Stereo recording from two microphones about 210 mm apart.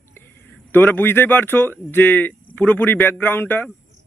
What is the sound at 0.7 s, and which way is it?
Speech, 10° left (ahead or behind).